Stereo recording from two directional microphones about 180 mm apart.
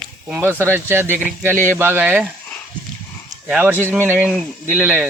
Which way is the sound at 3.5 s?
10° right (ahead or behind).